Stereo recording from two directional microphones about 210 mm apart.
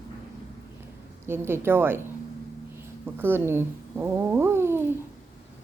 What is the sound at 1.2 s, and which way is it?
Speech, 10° right (ahead or behind).